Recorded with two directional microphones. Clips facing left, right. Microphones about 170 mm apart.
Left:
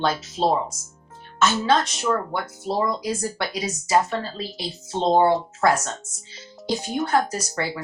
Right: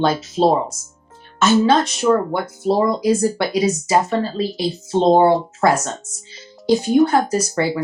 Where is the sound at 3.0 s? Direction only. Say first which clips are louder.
Right 10 dB; 10° right (ahead or behind).